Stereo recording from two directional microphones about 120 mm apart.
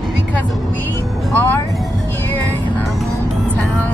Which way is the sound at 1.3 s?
20° left (ahead or behind).